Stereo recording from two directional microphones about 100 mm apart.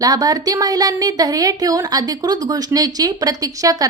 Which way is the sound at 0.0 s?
40° right (ahead or behind).